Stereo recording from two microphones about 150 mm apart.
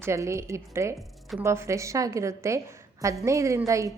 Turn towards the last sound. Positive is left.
turn(degrees=-20)  # may be behind; listen again after turning